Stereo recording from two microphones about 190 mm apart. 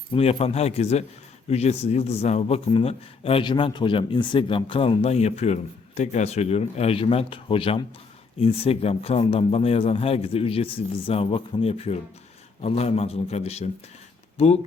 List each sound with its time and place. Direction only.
0.1 s a man's voice: 30° left (ahead or behind)